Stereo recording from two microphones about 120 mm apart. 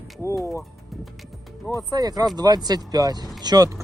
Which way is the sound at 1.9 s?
30° right (ahead or behind).